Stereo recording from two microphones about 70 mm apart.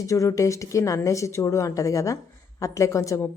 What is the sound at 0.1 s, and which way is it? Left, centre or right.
A woman's voice, left.